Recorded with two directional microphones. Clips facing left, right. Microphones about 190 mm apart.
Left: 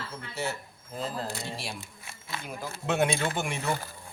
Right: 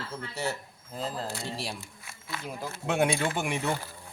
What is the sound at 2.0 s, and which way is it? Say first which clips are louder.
Speech: right 2 dB; 25° left (ahead or behind).